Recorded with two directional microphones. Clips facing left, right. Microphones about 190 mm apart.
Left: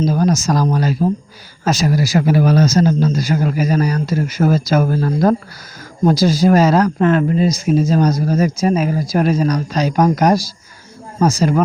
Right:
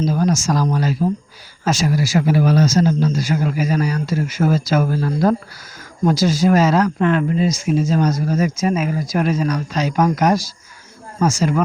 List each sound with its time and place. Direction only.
0.1 s speech: 40° left (ahead or behind)